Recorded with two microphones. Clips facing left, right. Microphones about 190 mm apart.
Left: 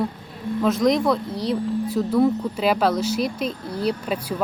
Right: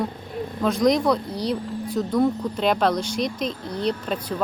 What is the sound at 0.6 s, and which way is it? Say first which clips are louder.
Speech: even; centre (ahead or behind).